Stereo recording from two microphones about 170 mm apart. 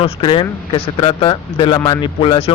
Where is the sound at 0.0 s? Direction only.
30° left (ahead or behind).